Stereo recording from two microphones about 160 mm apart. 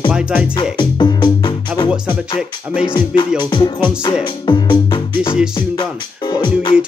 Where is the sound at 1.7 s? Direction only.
5° right (ahead or behind).